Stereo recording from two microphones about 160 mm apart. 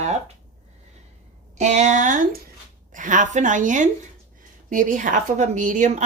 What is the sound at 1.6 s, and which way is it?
Speech, 45° right (ahead or behind).